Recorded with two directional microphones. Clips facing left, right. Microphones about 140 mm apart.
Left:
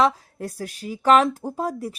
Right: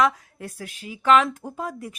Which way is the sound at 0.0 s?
40° left (ahead or behind).